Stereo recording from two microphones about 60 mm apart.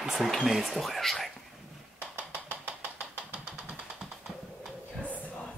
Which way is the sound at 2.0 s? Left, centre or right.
Centre.